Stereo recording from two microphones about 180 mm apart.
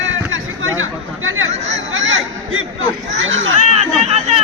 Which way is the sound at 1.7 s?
90° right.